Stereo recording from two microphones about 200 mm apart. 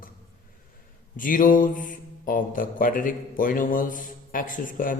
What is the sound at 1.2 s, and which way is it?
Mantra, 40° left (ahead or behind).